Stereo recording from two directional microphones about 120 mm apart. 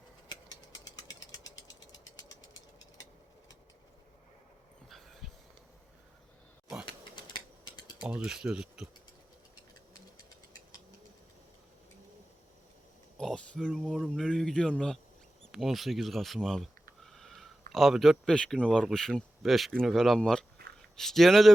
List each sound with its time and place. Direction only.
0.9 s ratchet: 30° left (ahead or behind)
4.9 s dog: centre (ahead or behind)
7.3 s typing: 40° left (ahead or behind)
8.0 s speech: 10° right (ahead or behind)
13.1 s speech: 5° left (ahead or behind)